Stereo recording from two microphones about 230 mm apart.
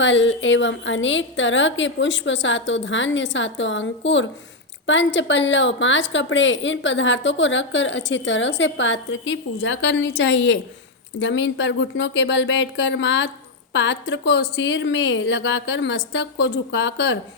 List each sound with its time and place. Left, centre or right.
0.0 s a woman's voice: left